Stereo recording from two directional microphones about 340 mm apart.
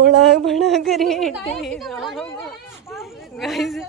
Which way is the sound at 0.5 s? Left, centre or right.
Centre.